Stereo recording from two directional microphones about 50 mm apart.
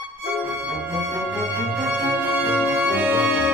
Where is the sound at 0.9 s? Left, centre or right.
Right.